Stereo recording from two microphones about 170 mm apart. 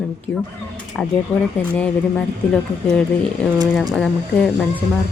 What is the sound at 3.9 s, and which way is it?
Speech, 5° left (ahead or behind).